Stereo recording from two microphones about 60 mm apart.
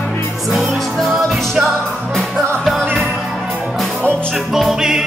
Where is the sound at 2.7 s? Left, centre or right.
Centre.